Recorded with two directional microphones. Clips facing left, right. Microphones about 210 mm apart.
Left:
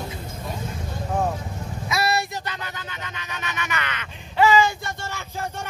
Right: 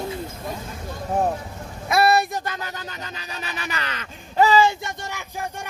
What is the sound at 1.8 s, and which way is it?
Speech, 55° right (ahead or behind).